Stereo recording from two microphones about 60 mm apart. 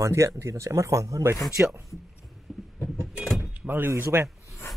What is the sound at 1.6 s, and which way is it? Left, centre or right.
Speech, right.